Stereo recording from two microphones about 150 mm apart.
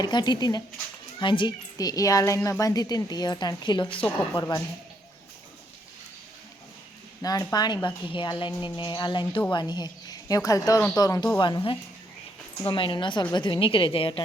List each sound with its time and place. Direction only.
0.0 s a woman's voice: 30° left (ahead or behind)
4.0 s a woman's voice: 10° left (ahead or behind)
4.4 s a woman's voice: 25° left (ahead or behind)
7.2 s a woman's voice: 25° left (ahead or behind)